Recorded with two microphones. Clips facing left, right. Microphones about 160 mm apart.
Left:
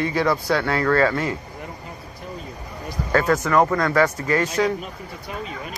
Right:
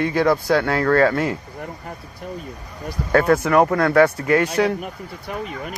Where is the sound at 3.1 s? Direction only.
55° right (ahead or behind).